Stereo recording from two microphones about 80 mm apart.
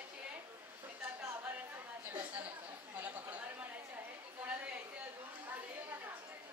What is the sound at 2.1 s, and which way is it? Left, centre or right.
Chatter, centre.